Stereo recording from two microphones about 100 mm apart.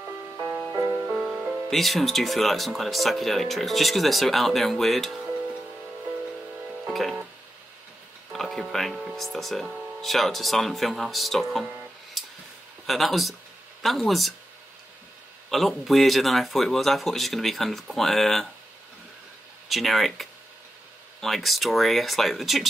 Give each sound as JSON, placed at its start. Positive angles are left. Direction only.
{"t": 0.5, "sound": "music", "side_deg": -20}
{"t": 1.7, "sound": "speech", "side_deg": 0}
{"t": 6.9, "sound": "music", "side_deg": 0}
{"t": 8.3, "sound": "speech", "side_deg": 0}
{"t": 12.2, "sound": "a sound", "side_deg": 0}
{"t": 12.8, "sound": "speech", "side_deg": 0}
{"t": 15.5, "sound": "speech", "side_deg": 0}
{"t": 19.7, "sound": "speech", "side_deg": 0}